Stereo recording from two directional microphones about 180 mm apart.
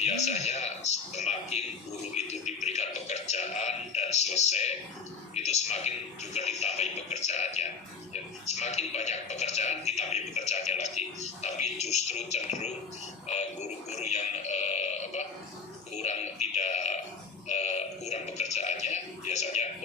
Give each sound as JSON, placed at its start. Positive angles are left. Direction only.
{"t": 0.0, "sound": "a man's voice", "side_deg": 40}
{"t": 2.1, "sound": "music", "side_deg": 40}
{"t": 5.3, "sound": "a man's voice", "side_deg": 40}